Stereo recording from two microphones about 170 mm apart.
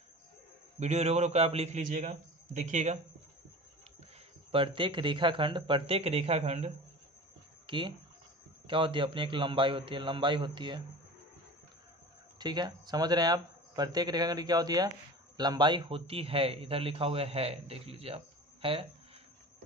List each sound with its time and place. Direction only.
0.7 s a man's voice: 40° right (ahead or behind)
4.5 s a man's voice: 30° right (ahead or behind)
7.6 s speech: 30° right (ahead or behind)
12.4 s a man's voice: 25° right (ahead or behind)